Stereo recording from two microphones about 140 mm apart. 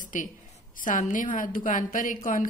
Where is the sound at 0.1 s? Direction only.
70° left (ahead or behind).